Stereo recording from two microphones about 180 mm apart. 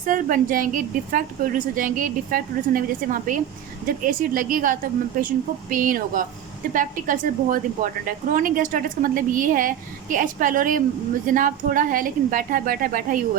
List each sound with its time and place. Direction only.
0.0 s a woman's voice: 50° right (ahead or behind)